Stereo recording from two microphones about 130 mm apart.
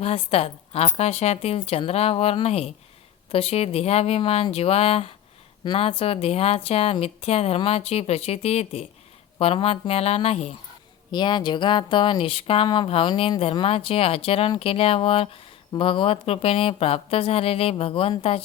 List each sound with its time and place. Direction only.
0.0 s a woman's voice: 50° left (ahead or behind)
11.1 s a woman's voice: 35° left (ahead or behind)